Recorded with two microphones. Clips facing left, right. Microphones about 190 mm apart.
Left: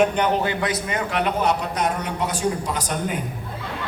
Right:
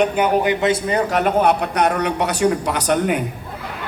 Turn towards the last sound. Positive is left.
turn(degrees=-70)  # may be behind; listen again after turning